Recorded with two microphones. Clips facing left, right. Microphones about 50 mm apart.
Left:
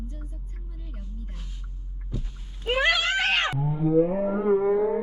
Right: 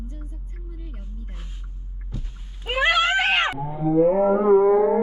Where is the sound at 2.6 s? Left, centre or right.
Centre.